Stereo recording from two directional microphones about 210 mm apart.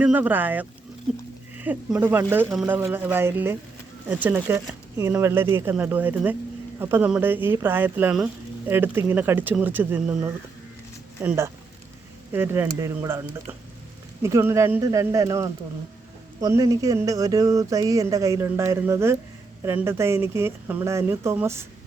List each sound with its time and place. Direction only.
0.0 s speech: 10° right (ahead or behind)